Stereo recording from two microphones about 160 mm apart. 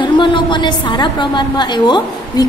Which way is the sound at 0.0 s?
30° left (ahead or behind).